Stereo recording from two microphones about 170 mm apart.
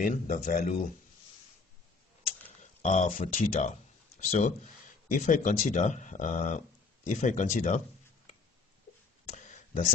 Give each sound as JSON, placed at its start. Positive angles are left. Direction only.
{"t": 0.0, "sound": "speech", "side_deg": 50}
{"t": 2.6, "sound": "speech", "side_deg": 45}
{"t": 9.3, "sound": "a sound", "side_deg": 45}